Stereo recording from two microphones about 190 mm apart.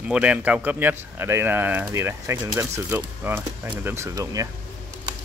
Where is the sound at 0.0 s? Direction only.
5° right (ahead or behind).